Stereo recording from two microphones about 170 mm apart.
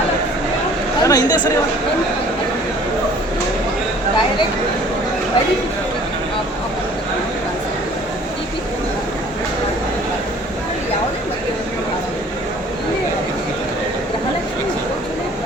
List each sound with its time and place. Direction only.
1.0 s speech: 20° left (ahead or behind)